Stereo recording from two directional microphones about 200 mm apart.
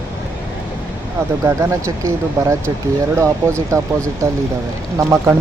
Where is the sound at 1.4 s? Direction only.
15° right (ahead or behind).